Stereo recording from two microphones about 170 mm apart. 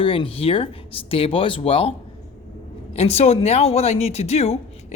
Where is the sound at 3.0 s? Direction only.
35° left (ahead or behind).